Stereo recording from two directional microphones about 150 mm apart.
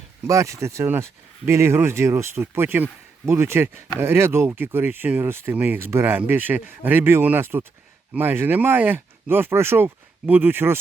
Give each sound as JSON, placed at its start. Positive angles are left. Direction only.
{"t": 0.3, "sound": "speech", "side_deg": -20}